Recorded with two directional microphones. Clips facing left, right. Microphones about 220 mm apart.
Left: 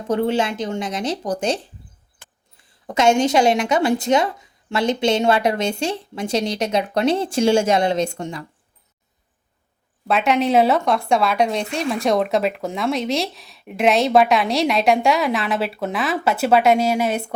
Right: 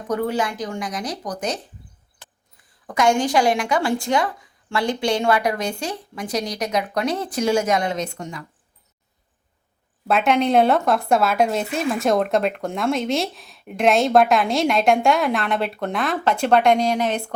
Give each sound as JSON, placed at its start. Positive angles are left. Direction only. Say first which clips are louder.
{"t": 0.1, "sound": "a woman's voice", "louder": "left 3 dB", "side_deg": 25}
{"t": 2.8, "sound": "a woman's voice", "louder": "left 3 dB", "side_deg": 25}
{"t": 10.1, "sound": "speech", "louder": "even", "side_deg": 0}